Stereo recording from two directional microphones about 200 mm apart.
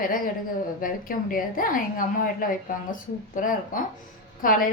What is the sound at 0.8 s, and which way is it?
A woman's voice, 45° left (ahead or behind).